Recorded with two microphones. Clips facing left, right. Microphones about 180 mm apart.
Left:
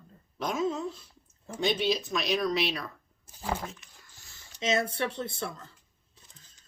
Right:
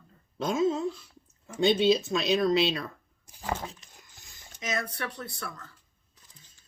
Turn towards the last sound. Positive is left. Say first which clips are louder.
# left 4 dB
turn(degrees=25)  # may be behind; listen again after turning